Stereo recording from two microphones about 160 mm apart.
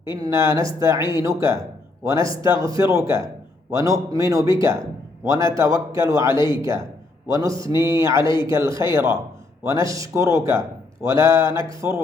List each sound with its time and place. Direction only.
0.2 s a man's voice: 20° right (ahead or behind)